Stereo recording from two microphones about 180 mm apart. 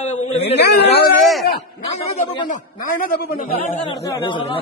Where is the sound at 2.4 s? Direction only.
50° left (ahead or behind).